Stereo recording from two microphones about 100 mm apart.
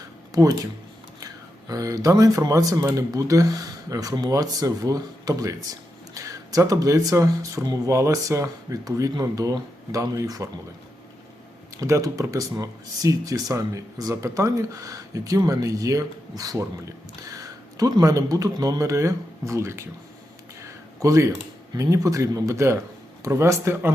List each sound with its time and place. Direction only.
0.3 s speech: 35° right (ahead or behind)
11.8 s a man's voice: 30° right (ahead or behind)
20.6 s a sound: 30° right (ahead or behind)
21.8 s speech: 30° right (ahead or behind)